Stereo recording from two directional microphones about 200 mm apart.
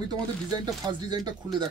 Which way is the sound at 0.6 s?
20° right (ahead or behind).